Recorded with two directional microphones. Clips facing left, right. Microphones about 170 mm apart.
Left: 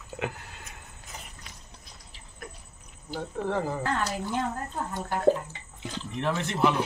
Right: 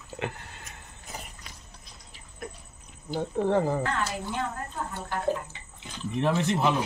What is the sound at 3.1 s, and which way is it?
Speech, 20° right (ahead or behind).